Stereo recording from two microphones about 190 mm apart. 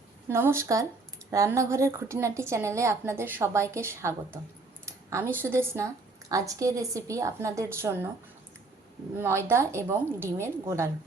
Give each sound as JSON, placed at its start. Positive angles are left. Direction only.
{"t": 0.3, "sound": "a woman's voice", "side_deg": -15}
{"t": 4.9, "sound": "a sound", "side_deg": -15}
{"t": 5.4, "sound": "a woman's voice", "side_deg": -15}
{"t": 9.1, "sound": "a woman's voice", "side_deg": -10}